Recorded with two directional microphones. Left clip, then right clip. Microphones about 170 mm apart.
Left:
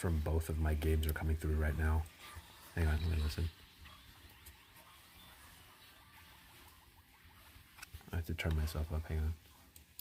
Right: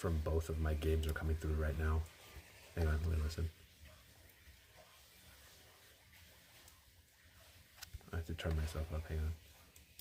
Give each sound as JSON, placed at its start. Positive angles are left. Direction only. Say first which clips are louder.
{"t": 0.0, "sound": "speech", "louder": "even", "side_deg": 25}
{"t": 2.7, "sound": "speech", "louder": "left 1 dB", "side_deg": 10}
{"t": 8.1, "sound": "speech", "louder": "left 3 dB", "side_deg": 30}